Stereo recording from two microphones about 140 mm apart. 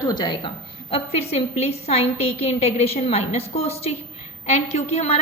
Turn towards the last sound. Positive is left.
turn(degrees=50)  # may be behind; listen again after turning